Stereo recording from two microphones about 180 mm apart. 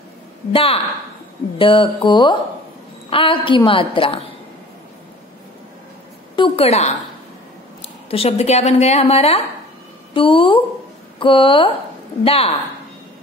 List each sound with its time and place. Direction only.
0.5 s a woman's voice: 30° left (ahead or behind)
6.3 s a woman's voice: 30° left (ahead or behind)
8.1 s a woman's voice: 35° left (ahead or behind)